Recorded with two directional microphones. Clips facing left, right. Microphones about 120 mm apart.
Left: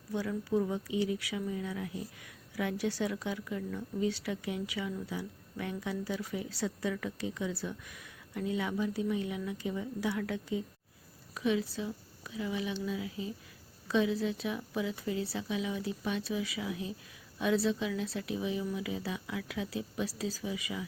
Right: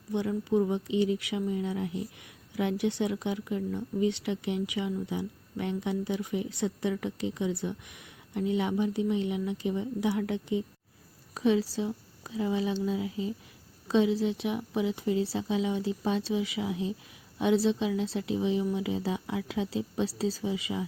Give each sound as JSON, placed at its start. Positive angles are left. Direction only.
{"t": 0.1, "sound": "speech", "side_deg": -20}
{"t": 11.3, "sound": "speech", "side_deg": -30}